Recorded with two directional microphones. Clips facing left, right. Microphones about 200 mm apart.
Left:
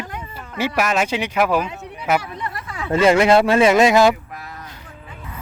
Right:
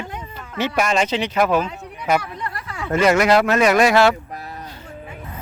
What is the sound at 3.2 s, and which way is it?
Speech, 25° left (ahead or behind).